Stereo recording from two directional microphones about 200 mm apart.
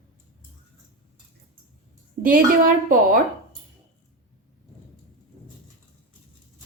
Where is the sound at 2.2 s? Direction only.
45° right (ahead or behind).